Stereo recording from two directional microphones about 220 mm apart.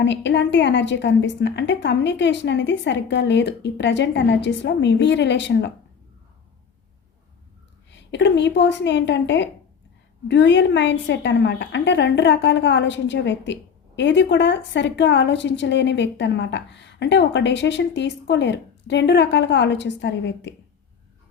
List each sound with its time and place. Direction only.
0.0 s a woman's voice: 55° left (ahead or behind)
7.9 s a woman's voice: 55° left (ahead or behind)